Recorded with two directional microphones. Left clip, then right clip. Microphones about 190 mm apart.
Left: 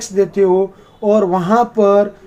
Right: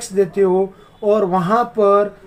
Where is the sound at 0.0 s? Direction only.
15° left (ahead or behind).